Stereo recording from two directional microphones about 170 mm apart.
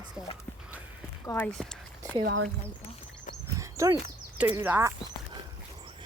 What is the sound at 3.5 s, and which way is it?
Dog, 20° right (ahead or behind).